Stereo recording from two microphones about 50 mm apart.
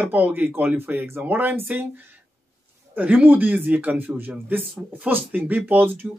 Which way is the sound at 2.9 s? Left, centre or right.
Right.